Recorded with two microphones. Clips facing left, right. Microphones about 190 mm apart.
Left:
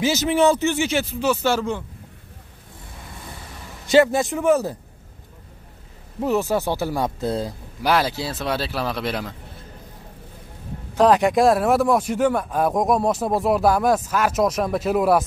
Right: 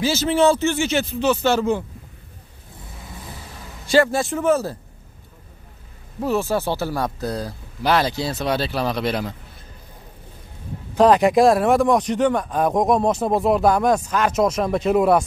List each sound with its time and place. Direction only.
0.0 s speech: 20° left (ahead or behind)
3.8 s speech: 20° left (ahead or behind)
6.2 s speech: 20° left (ahead or behind)
7.8 s speech: 10° left (ahead or behind)
11.0 s speech: centre (ahead or behind)